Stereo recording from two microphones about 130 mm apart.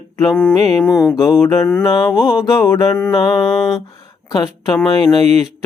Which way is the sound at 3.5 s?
Centre (ahead or behind).